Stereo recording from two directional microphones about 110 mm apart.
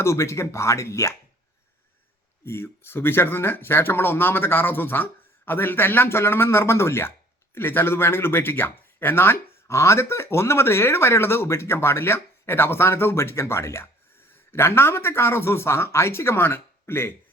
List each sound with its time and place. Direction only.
0.0 s speech: 25° left (ahead or behind)
2.4 s speech: 20° left (ahead or behind)